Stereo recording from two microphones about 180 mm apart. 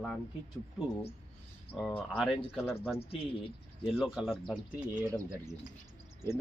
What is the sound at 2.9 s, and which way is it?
Speech, 35° left (ahead or behind).